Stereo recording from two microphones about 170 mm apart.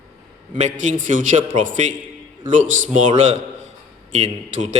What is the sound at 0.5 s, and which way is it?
Speech, 45° right (ahead or behind).